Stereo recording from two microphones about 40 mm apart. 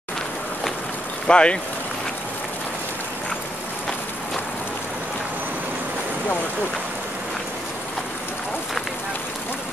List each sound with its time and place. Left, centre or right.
1.2 s speech: left